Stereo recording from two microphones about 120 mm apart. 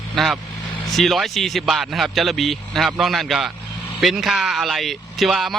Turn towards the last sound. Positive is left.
turn(degrees=0)  # may be behind; listen again after turning